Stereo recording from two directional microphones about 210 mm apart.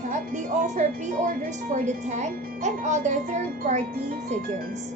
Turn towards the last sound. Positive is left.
turn(degrees=-35)  # may be behind; listen again after turning